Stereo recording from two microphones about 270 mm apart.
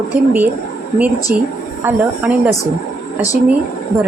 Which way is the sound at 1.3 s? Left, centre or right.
Right.